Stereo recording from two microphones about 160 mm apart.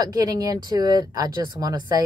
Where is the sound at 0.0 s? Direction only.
20° right (ahead or behind).